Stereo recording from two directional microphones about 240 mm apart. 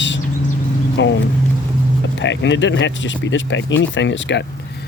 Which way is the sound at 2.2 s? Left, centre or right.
Left.